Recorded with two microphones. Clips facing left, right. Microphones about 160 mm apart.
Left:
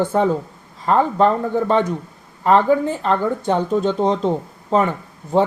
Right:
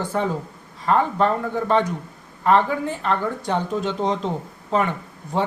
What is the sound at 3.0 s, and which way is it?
Speech, 35° left (ahead or behind).